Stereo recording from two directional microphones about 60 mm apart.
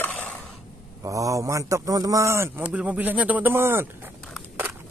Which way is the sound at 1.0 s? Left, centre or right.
Right.